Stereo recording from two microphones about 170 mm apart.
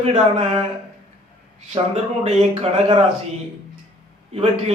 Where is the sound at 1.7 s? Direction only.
40° right (ahead or behind).